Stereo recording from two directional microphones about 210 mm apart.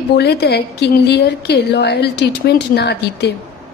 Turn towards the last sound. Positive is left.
turn(degrees=50)  # may be behind; listen again after turning